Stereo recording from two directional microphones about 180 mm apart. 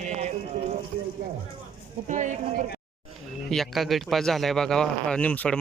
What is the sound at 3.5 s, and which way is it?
Speech, centre (ahead or behind).